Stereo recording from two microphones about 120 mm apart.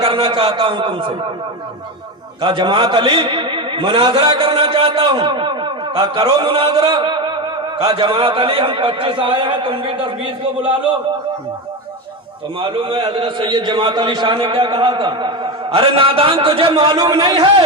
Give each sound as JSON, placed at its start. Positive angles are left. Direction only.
{"t": 0.0, "sound": "a man's voice", "side_deg": -50}
{"t": 2.4, "sound": "a man's voice", "side_deg": -45}
{"t": 12.5, "sound": "a man's voice", "side_deg": -45}
{"t": 17.0, "sound": "a man's voice", "side_deg": -35}